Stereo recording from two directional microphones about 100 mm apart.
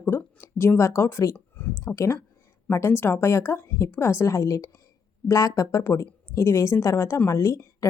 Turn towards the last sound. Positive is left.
turn(degrees=30)  # may be behind; listen again after turning